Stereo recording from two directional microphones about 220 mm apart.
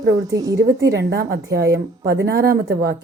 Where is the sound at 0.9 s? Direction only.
50° right (ahead or behind).